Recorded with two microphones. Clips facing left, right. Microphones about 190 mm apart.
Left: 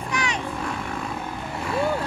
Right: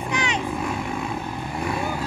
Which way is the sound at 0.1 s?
20° right (ahead or behind).